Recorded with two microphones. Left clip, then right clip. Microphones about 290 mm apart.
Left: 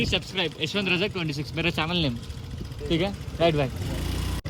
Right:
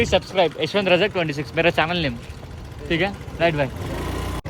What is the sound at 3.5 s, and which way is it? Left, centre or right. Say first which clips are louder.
Speech: right 3 dB; centre.